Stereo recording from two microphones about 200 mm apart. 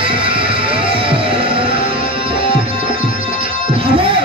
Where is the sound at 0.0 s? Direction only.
25° right (ahead or behind).